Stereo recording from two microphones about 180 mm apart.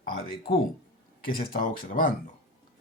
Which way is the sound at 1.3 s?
55° left (ahead or behind).